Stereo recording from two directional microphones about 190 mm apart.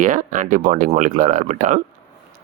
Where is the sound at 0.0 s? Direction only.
45° right (ahead or behind).